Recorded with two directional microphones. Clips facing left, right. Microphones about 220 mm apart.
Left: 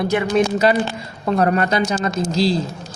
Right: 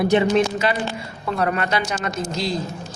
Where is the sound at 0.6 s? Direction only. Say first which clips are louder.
Left 6 dB; 40° left (ahead or behind).